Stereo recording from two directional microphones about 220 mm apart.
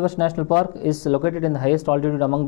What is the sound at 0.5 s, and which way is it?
Speech, 25° left (ahead or behind).